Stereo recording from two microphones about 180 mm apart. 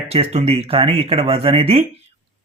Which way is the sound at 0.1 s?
35° right (ahead or behind).